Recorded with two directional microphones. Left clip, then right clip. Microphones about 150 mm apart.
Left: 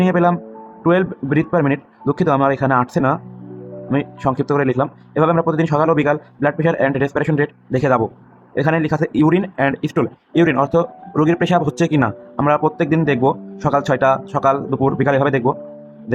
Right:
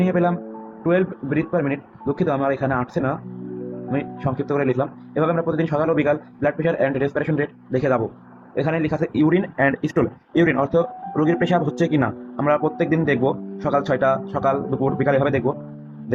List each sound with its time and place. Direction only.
0.0 s speech: 35° left (ahead or behind)